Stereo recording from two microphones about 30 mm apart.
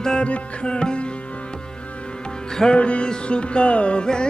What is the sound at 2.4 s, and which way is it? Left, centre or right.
Music, left.